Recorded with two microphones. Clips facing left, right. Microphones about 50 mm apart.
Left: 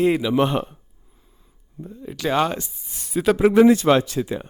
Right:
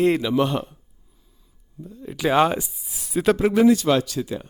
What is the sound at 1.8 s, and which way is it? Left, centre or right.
Speech, left.